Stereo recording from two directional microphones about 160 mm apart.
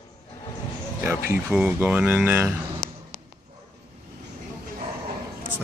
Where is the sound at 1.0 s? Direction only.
15° right (ahead or behind).